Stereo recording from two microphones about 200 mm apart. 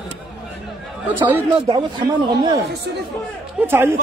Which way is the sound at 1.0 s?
10° right (ahead or behind).